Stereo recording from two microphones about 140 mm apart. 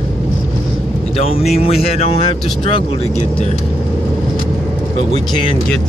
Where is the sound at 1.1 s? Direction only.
45° left (ahead or behind).